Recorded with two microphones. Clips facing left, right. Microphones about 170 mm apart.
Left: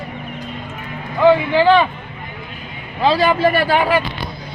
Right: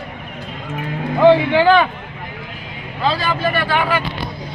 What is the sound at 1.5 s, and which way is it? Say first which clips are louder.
Speech: even; 5° right (ahead or behind).